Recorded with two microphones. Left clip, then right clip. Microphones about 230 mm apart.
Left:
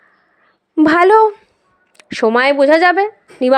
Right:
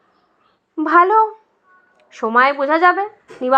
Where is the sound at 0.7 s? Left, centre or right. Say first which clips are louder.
Left 3 dB; left.